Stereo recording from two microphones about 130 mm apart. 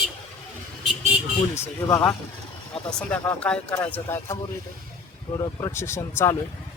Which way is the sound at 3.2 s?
10° left (ahead or behind).